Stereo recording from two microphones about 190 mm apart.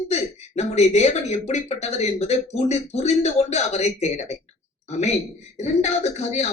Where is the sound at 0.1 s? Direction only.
35° left (ahead or behind).